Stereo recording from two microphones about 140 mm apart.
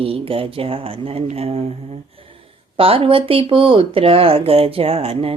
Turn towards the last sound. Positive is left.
turn(degrees=-45)  # may be behind; listen again after turning